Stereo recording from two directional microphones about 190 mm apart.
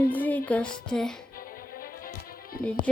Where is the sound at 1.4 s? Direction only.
50° left (ahead or behind).